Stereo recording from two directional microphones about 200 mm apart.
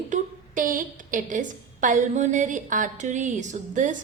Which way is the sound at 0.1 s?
40° right (ahead or behind).